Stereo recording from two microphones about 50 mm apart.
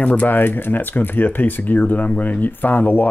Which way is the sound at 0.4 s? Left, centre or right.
Left.